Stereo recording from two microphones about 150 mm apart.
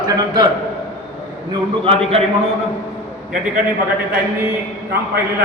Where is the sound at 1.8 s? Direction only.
40° right (ahead or behind).